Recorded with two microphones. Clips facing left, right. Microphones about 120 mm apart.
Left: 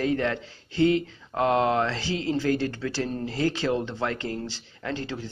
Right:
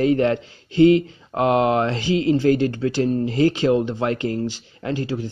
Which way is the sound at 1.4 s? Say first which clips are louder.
Right 4 dB; 15° right (ahead or behind).